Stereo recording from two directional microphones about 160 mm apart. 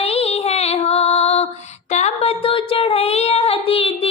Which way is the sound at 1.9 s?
40° left (ahead or behind).